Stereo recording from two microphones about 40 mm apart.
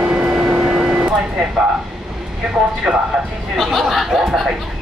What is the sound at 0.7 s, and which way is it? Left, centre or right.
Vehicle, centre.